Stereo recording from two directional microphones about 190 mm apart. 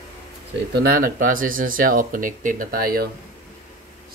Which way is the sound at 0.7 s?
50° right (ahead or behind).